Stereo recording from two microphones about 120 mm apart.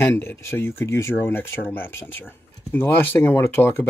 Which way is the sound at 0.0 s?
20° left (ahead or behind).